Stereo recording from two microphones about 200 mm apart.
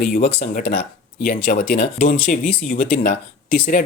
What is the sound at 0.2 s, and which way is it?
Speech, 40° left (ahead or behind).